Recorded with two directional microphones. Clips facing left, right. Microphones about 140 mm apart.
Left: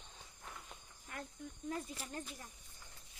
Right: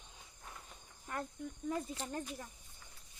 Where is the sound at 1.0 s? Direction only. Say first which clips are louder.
Right 7 dB; 45° right (ahead or behind).